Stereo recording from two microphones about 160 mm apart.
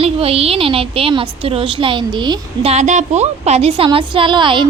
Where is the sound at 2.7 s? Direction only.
50° right (ahead or behind); by 4.7 s 30° right (ahead or behind).